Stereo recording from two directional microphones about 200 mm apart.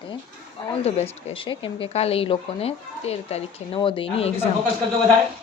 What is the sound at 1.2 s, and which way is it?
Speech, 25° left (ahead or behind).